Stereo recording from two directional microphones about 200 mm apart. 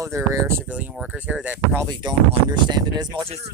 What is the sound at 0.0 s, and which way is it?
Speech, 15° right (ahead or behind).